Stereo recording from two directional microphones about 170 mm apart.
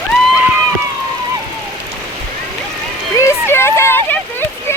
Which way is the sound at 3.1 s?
15° left (ahead or behind).